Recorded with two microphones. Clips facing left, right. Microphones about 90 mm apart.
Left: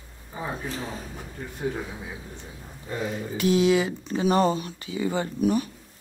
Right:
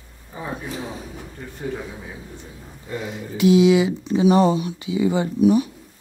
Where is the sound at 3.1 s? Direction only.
45° left (ahead or behind).